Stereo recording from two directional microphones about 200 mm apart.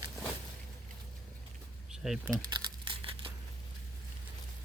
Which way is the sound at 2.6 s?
25° right (ahead or behind).